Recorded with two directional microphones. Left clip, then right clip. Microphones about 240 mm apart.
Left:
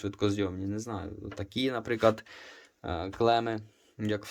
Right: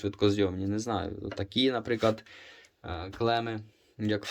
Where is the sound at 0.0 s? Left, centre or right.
Centre.